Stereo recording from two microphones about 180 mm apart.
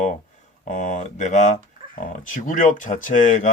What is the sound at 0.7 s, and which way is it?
Speech, 45° left (ahead or behind).